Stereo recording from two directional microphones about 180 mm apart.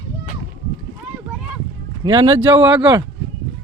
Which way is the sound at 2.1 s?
30° right (ahead or behind).